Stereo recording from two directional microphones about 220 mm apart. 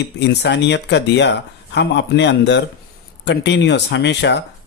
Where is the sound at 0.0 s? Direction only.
50° left (ahead or behind).